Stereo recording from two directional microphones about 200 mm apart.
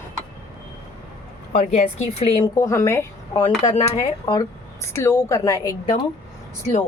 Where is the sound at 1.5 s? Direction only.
35° left (ahead or behind).